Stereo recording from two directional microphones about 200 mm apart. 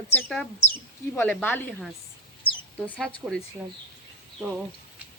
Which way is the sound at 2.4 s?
25° left (ahead or behind).